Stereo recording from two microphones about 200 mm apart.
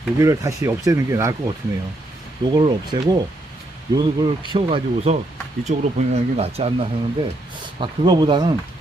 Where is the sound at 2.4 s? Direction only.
25° right (ahead or behind).